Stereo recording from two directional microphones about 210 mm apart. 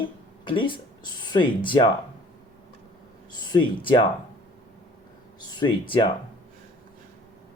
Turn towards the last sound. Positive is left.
turn(degrees=25)  # may be behind; listen again after turning